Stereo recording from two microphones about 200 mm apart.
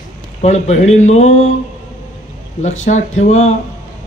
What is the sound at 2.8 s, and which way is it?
Speech, 35° left (ahead or behind).